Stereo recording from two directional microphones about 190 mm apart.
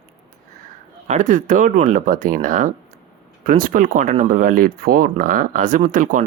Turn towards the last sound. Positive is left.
turn(degrees=-45)  # may be behind; listen again after turning